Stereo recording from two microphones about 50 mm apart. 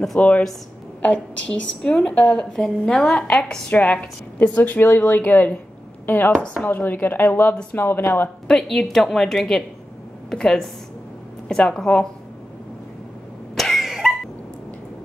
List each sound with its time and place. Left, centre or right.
0.2 s a woman's voice: left
1.0 s a woman's voice: left
1.8 s a woman's voice: centre
3.7 s a woman's voice: left
4.4 s a woman's voice: left
7.7 s speech: left
8.5 s a woman's voice: centre
13.6 s cough: centre
13.8 s cough: centre